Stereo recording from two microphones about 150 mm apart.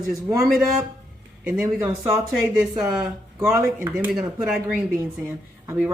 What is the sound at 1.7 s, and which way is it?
Speech, 15° right (ahead or behind).